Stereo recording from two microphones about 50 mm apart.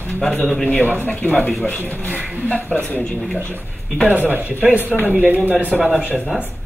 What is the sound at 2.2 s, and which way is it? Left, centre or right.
Zipper, centre.